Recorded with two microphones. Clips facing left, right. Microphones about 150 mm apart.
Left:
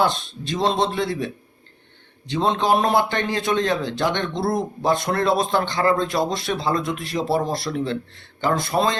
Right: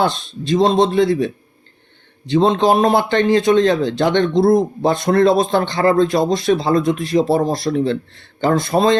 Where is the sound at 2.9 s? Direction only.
25° right (ahead or behind).